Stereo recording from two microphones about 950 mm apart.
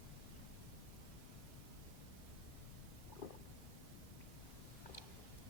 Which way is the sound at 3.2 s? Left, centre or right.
Left.